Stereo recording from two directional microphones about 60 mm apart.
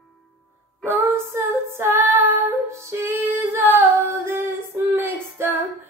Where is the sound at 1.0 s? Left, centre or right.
Right.